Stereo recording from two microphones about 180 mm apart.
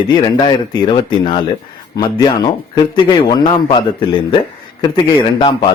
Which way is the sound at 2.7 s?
25° left (ahead or behind).